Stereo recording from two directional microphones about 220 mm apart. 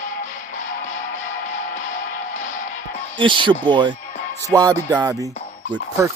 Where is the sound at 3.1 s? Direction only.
20° right (ahead or behind).